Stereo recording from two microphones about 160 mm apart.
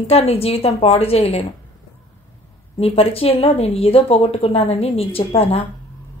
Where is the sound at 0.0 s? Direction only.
40° left (ahead or behind).